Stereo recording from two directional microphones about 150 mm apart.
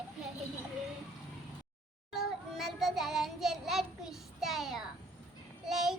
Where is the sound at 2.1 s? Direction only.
Centre (ahead or behind).